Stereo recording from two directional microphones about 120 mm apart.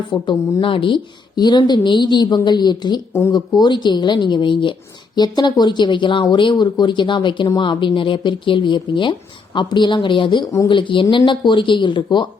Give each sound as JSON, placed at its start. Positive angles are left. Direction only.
{"t": 0.1, "sound": "speech", "side_deg": 35}
{"t": 3.1, "sound": "speech", "side_deg": 20}
{"t": 3.3, "sound": "speech", "side_deg": 35}